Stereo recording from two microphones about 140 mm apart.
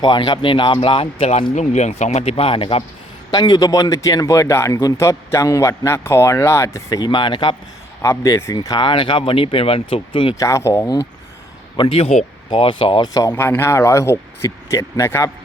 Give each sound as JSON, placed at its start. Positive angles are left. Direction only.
{"t": 0.0, "sound": "speech", "side_deg": 35}
{"t": 3.3, "sound": "speech", "side_deg": 30}
{"t": 7.0, "sound": "speech", "side_deg": 35}
{"t": 8.0, "sound": "speech", "side_deg": 20}
{"t": 10.3, "sound": "speech", "side_deg": 20}
{"t": 11.8, "sound": "speech", "side_deg": 45}
{"t": 13.1, "sound": "speech", "side_deg": 20}